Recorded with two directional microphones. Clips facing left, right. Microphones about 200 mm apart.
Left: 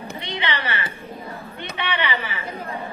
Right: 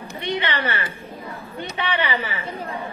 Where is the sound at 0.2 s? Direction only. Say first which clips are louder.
Right 4 dB; 50° right (ahead or behind).